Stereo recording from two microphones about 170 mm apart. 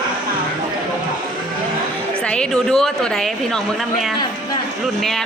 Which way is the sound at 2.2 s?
5° left (ahead or behind).